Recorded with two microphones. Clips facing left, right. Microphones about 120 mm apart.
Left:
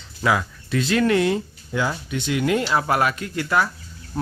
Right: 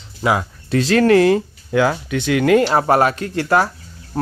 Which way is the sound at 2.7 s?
40° right (ahead or behind).